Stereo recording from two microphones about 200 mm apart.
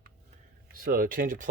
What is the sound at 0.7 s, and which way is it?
Speech, 45° right (ahead or behind).